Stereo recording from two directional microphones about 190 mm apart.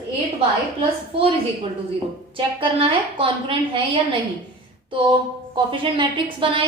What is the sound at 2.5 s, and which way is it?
A woman's voice, 30° right (ahead or behind).